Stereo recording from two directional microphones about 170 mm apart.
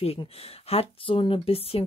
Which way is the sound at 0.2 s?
35° left (ahead or behind).